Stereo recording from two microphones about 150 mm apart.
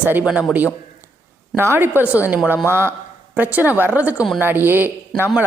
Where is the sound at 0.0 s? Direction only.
10° right (ahead or behind).